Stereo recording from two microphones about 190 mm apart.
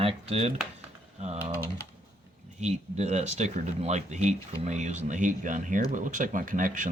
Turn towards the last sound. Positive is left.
turn(degrees=-45)  # may be behind; listen again after turning